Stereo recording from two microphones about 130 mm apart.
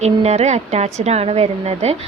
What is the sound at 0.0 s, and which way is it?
A woman's voice, 55° right (ahead or behind).